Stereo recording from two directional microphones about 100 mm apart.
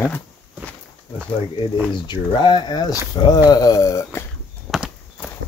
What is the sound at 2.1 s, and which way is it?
Speech, 50° left (ahead or behind).